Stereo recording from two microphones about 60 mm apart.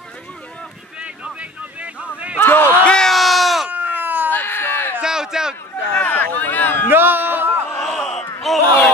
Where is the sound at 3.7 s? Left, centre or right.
Right.